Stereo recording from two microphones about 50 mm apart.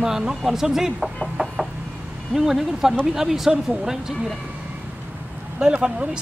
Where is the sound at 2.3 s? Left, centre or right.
Centre.